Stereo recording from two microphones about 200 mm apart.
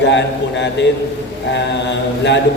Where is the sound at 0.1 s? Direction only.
65° left (ahead or behind).